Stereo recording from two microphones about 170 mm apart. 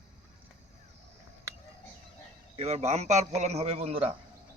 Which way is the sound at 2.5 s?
40° right (ahead or behind).